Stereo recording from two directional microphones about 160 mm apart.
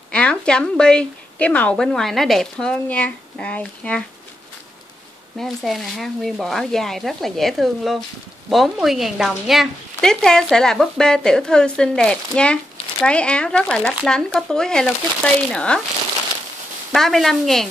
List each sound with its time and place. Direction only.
0.1 s speech: 5° left (ahead or behind)
5.4 s speech: centre (ahead or behind)
16.9 s speech: centre (ahead or behind)